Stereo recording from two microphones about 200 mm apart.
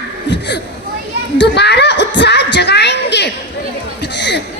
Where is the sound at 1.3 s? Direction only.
55° left (ahead or behind).